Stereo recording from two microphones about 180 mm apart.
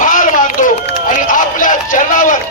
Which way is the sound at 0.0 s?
45° left (ahead or behind).